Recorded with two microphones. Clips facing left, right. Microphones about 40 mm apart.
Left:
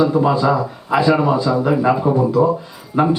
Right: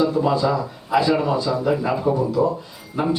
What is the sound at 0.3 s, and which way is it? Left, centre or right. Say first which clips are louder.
Speech: left 4 dB; centre.